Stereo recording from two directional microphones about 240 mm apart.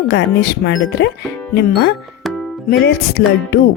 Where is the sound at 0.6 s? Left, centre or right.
Left.